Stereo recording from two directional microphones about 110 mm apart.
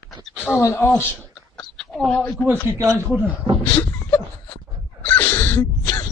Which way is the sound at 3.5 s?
60° right (ahead or behind).